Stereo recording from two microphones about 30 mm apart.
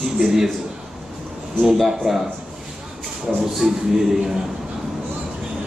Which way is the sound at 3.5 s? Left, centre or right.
Centre.